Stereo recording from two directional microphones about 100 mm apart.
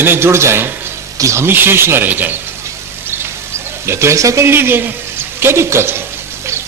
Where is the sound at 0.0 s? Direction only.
25° right (ahead or behind).